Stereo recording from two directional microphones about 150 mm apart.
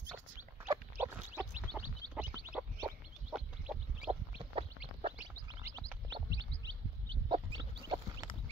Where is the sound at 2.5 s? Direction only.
10° right (ahead or behind).